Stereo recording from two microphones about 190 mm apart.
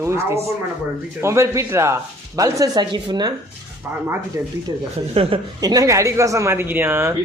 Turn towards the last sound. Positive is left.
turn(degrees=-10)  # may be behind; listen again after turning